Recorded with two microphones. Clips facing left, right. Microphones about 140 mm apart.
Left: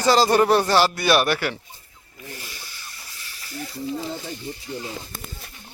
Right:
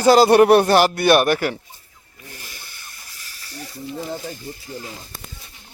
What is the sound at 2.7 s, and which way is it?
Steam, 50° right (ahead or behind).